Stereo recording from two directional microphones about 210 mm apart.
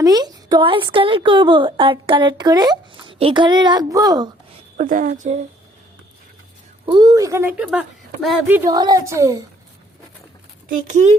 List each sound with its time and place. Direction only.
0.0 s a woman's voice: 20° right (ahead or behind)
4.8 s a woman's voice: 40° right (ahead or behind)
6.8 s speech: 20° right (ahead or behind)
10.7 s a woman's voice: 35° right (ahead or behind)